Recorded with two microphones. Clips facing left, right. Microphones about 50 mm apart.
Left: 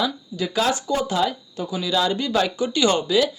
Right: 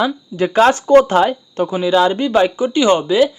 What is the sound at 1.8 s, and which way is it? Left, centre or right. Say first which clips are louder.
Speech: right 8 dB; right.